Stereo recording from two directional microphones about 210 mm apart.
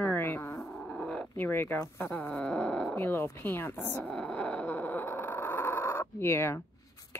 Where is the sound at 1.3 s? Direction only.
10° left (ahead or behind).